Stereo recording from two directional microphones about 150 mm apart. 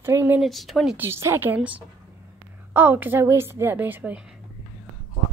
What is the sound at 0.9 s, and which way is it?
A woman's voice, 15° right (ahead or behind).